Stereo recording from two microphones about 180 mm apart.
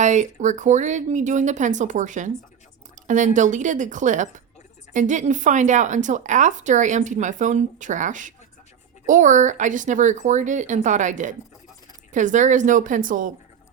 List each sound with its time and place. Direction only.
0.0 s speech: 40° right (ahead or behind)